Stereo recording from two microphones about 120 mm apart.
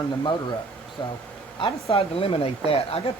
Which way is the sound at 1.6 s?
50° left (ahead or behind).